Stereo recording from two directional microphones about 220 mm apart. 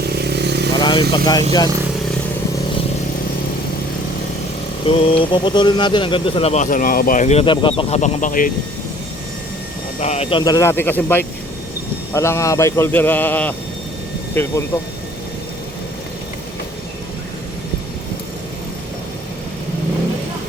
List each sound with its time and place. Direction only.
0.1 s motorcycle: 50° right (ahead or behind)
0.8 s a sound: 20° left (ahead or behind)
1.1 s a man's voice: 20° left (ahead or behind)
4.9 s speech: 25° left (ahead or behind)
10.0 s a man's voice: 30° left (ahead or behind); by 14.5 s 10° left (ahead or behind)